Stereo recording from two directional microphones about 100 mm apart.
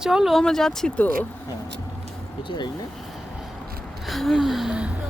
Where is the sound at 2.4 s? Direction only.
50° left (ahead or behind).